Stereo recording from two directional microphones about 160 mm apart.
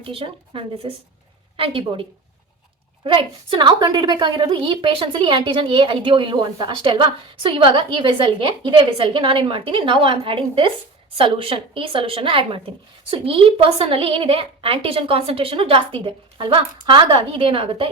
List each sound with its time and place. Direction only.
0.0 s a woman's voice: 35° right (ahead or behind)